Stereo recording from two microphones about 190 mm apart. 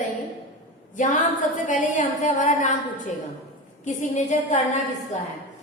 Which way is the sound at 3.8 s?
40° left (ahead or behind).